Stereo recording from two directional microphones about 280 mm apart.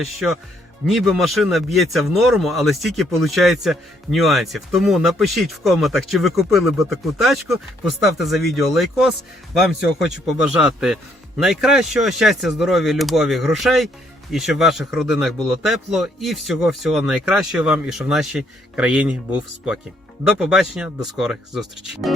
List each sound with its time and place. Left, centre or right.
0.0 s speech: centre